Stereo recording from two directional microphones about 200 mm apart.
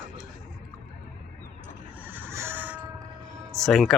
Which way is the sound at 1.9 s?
10° right (ahead or behind).